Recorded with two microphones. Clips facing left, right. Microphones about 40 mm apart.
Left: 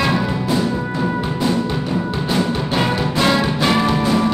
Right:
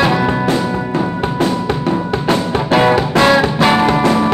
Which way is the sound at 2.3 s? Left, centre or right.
Right.